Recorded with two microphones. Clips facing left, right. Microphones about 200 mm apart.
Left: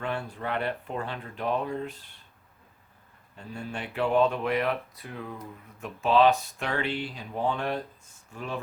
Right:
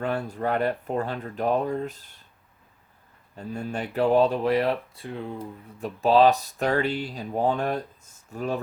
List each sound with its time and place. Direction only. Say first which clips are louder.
0.0 s speech: right 5 dB; 40° right (ahead or behind)
3.3 s speech: right 6 dB; 40° right (ahead or behind)